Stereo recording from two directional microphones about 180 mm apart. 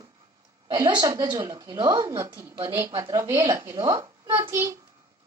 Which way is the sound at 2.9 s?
25° right (ahead or behind).